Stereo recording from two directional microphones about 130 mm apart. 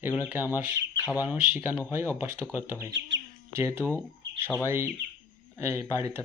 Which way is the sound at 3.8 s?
15° left (ahead or behind).